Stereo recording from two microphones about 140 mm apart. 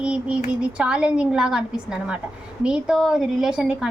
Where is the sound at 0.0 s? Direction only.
5° right (ahead or behind).